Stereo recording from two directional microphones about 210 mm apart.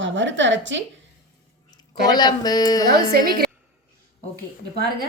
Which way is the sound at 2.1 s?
20° left (ahead or behind).